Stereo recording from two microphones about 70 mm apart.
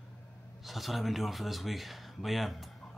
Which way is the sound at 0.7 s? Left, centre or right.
Centre.